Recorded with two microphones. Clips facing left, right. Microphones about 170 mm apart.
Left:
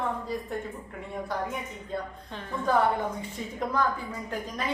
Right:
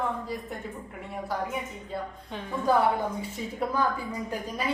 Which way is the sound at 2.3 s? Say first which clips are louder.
Right 2 dB; 10° right (ahead or behind).